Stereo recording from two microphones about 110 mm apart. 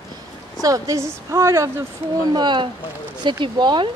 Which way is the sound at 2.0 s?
60° right (ahead or behind).